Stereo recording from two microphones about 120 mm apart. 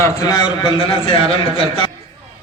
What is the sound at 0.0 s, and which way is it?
A man's voice, 30° left (ahead or behind).